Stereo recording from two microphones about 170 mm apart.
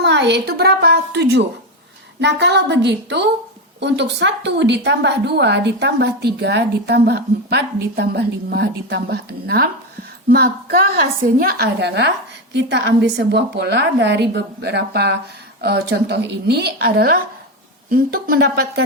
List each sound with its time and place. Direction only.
0.0 s a woman's voice: 90° right
2.2 s a woman's voice: 90° right; by 18.7 s 70° right (ahead or behind)